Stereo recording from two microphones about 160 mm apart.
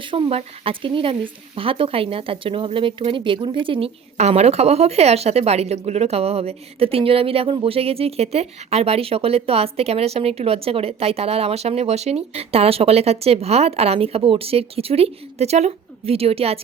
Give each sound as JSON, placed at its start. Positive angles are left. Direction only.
{"t": 0.0, "sound": "speech", "side_deg": -30}